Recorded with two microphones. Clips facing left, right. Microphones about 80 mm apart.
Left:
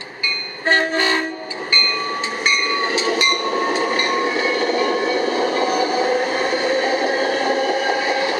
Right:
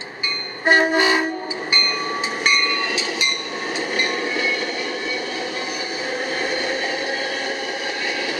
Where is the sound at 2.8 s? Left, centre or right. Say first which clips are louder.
Left 5 dB; left.